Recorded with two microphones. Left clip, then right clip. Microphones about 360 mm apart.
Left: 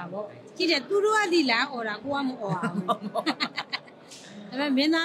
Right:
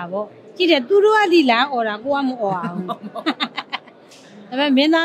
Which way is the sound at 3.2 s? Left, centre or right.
Right.